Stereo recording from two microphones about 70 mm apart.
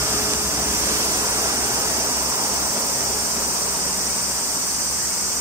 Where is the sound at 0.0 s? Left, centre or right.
Right.